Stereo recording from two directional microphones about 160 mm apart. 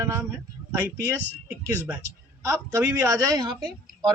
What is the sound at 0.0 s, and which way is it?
A man's voice, 15° right (ahead or behind).